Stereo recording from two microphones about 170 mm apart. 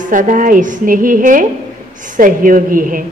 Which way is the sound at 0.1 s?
50° right (ahead or behind).